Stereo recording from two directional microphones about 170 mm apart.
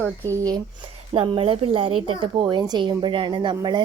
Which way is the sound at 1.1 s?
30° right (ahead or behind).